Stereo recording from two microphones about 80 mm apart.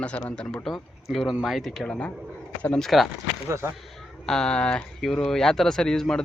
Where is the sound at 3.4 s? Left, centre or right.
Right.